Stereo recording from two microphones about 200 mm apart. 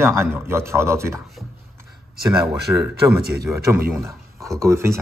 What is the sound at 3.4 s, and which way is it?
A man's voice, 15° right (ahead or behind).